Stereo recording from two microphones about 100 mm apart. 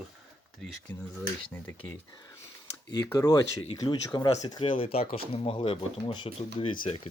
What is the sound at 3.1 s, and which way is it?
Speech, 35° left (ahead or behind).